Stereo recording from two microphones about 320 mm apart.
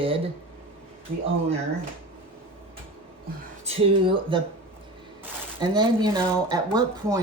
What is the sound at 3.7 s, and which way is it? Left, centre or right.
Speech, centre.